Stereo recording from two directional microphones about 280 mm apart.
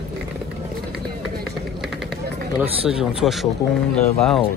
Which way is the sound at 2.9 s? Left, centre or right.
Centre.